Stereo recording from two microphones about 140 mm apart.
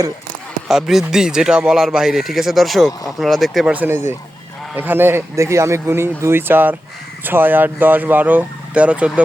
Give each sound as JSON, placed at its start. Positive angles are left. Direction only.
{"t": 0.7, "sound": "speech", "side_deg": 0}
{"t": 3.7, "sound": "speech", "side_deg": -15}